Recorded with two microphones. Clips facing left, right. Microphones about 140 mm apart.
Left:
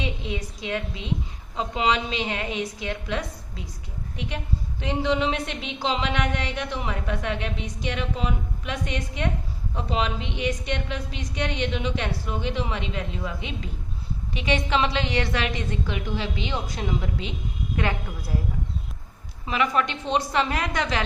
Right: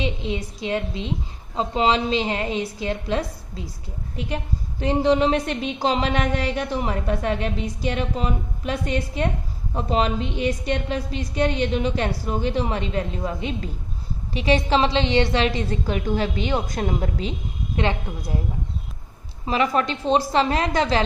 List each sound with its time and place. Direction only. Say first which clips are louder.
0.0 s a woman's voice: right 4 dB; 30° right (ahead or behind)
4.8 s a woman's voice: right 6 dB; 40° right (ahead or behind)
16.0 s a woman's voice: right 6 dB; 45° right (ahead or behind)
17.7 s a woman's voice: right 4 dB; 25° right (ahead or behind)
19.5 s a woman's voice: right 3 dB; 35° right (ahead or behind)